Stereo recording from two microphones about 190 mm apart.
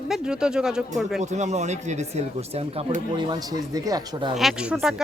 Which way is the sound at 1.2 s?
35° right (ahead or behind).